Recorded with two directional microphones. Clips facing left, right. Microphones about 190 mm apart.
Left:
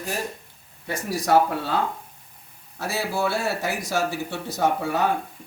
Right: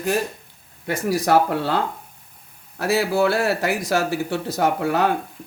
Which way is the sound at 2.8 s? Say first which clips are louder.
Right 7 dB; 90° right.